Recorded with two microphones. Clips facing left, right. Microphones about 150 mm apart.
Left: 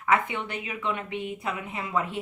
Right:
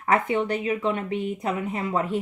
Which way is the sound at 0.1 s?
40° right (ahead or behind).